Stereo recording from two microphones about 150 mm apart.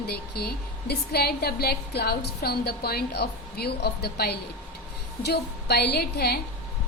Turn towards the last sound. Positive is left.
turn(degrees=90)